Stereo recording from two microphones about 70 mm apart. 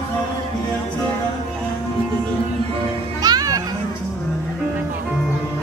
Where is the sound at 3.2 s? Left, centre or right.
Right.